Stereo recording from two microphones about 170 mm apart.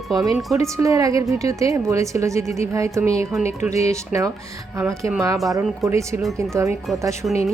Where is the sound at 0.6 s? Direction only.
20° right (ahead or behind).